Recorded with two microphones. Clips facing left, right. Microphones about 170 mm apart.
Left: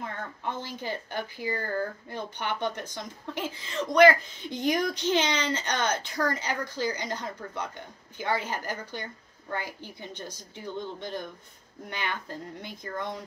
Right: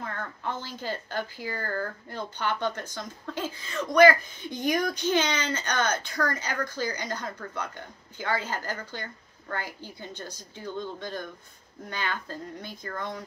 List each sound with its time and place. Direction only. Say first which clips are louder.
0.0 s speech: even; 20° left (ahead or behind)